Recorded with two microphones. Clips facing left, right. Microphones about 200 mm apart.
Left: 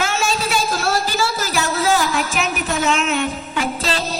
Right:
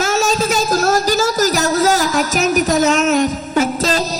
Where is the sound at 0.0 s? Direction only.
40° right (ahead or behind).